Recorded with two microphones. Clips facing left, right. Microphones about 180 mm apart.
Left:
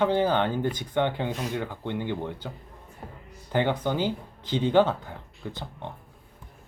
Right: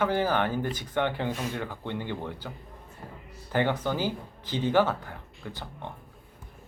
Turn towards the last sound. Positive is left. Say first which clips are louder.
# left 2 dB
turn(degrees=20)  # may be behind; listen again after turning